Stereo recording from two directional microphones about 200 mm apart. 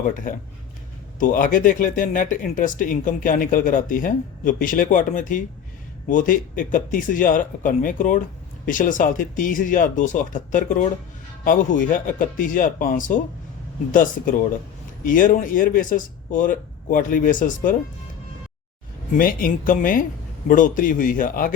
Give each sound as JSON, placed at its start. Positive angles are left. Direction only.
{"t": 0.1, "sound": "speech", "side_deg": 40}
{"t": 19.1, "sound": "speech", "side_deg": 45}